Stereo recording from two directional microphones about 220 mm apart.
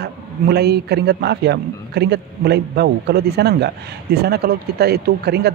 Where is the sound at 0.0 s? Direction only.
50° right (ahead or behind).